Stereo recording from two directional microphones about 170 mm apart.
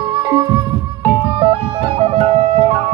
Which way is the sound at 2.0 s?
40° right (ahead or behind).